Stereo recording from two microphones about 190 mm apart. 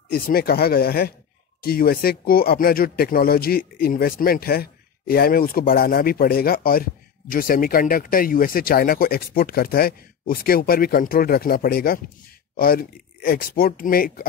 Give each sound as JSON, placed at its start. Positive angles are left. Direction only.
{"t": 0.1, "sound": "speech", "side_deg": 50}